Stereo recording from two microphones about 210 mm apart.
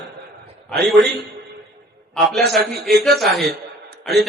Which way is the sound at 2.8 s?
50° right (ahead or behind).